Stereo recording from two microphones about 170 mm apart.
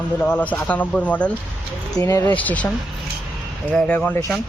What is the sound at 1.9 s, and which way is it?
Speech, 20° left (ahead or behind).